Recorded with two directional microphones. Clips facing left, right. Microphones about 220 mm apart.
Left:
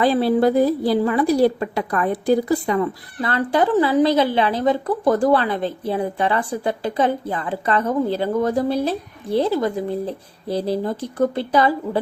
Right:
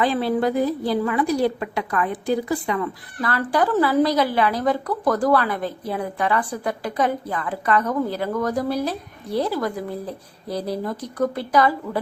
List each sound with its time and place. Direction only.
0.0 s a woman's voice: 35° left (ahead or behind)
3.2 s a woman's voice: 25° left (ahead or behind)